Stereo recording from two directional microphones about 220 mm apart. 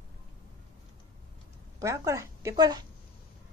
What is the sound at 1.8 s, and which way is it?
A woman's voice, 15° right (ahead or behind).